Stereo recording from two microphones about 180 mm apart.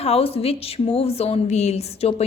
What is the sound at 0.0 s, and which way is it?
A woman's voice, 35° left (ahead or behind).